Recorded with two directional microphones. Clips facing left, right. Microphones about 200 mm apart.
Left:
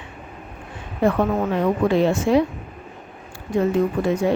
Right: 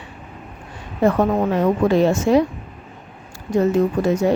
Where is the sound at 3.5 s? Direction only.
40° right (ahead or behind).